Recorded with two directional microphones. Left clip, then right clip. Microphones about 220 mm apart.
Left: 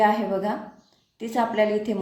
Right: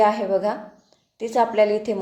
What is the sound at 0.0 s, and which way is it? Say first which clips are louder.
A woman's voice: right 3 dB; 35° right (ahead or behind).